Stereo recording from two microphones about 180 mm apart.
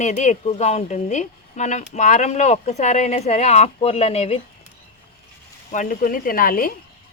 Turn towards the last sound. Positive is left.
turn(degrees=55)  # may be behind; listen again after turning